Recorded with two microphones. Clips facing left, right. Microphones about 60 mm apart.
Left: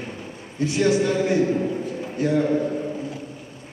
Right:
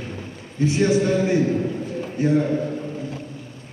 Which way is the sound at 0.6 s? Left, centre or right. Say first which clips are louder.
Right 1 dB; right.